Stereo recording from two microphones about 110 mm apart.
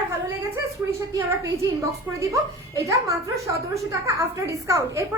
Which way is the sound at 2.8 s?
30° right (ahead or behind).